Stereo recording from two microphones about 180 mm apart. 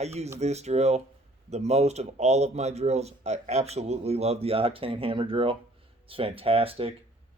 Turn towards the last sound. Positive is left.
turn(degrees=-30)  # may be behind; listen again after turning